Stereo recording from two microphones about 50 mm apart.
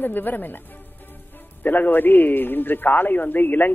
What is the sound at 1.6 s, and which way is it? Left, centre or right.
A man's voice, left.